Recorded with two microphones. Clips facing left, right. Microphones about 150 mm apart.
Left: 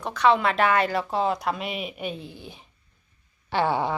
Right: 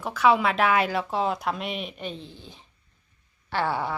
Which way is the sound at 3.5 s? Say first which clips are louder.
Left 3 dB; 20° left (ahead or behind).